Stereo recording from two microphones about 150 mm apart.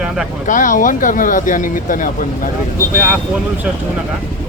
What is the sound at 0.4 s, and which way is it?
Speech, 60° left (ahead or behind).